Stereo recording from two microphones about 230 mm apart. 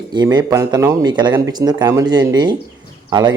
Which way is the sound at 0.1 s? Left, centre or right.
Centre.